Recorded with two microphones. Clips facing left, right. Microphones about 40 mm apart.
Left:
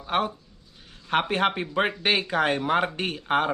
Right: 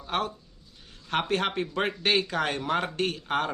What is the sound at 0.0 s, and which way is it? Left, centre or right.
Speech, centre.